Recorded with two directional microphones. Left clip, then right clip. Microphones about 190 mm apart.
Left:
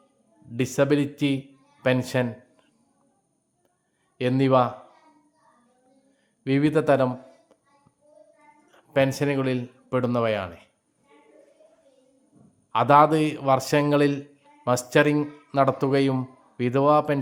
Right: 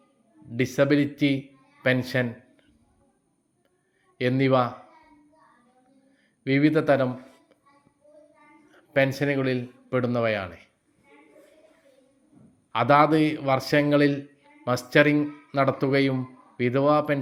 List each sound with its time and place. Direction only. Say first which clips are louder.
0.5 s a man's voice: even; 15° left (ahead or behind)
4.2 s a man's voice: left 2 dB; 15° left (ahead or behind)
6.4 s a man's voice: even; 15° left (ahead or behind)
8.6 s a man's voice: left 1 dB; 20° left (ahead or behind)
12.7 s a man's voice: left 2 dB; 15° left (ahead or behind)